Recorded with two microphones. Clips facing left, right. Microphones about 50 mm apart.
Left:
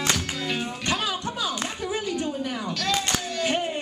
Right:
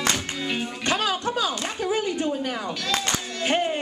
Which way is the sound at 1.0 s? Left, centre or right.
Right.